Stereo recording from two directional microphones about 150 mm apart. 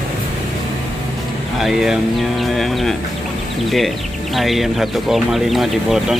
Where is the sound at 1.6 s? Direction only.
5° right (ahead or behind).